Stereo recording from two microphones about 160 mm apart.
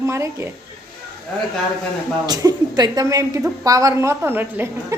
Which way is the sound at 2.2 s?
25° right (ahead or behind).